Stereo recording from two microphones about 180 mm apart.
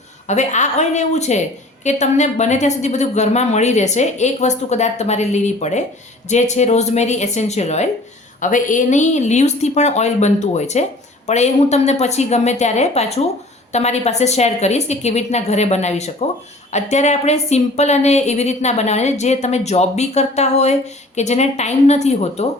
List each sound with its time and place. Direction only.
0.3 s a woman's voice: 40° left (ahead or behind)